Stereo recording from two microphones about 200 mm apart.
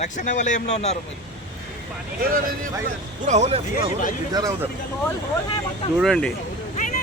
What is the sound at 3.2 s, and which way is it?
Speech, 35° right (ahead or behind).